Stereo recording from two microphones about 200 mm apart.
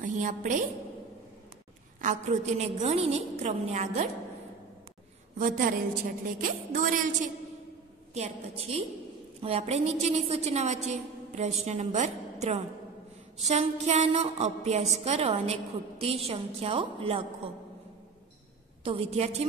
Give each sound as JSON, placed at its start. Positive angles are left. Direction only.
{"t": 0.0, "sound": "a woman's voice", "side_deg": -40}
{"t": 2.0, "sound": "a woman's voice", "side_deg": -35}
{"t": 5.4, "sound": "a woman's voice", "side_deg": -45}
{"t": 18.9, "sound": "a woman's voice", "side_deg": -30}